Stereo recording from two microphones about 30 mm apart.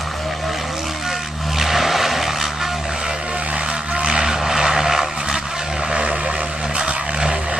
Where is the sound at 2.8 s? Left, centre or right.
Right.